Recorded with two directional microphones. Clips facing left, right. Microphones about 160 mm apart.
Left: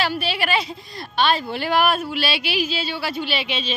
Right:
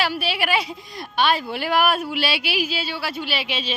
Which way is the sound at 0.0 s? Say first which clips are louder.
Even; 10° right (ahead or behind).